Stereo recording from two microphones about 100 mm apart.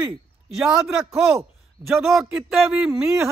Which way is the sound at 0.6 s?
5° right (ahead or behind).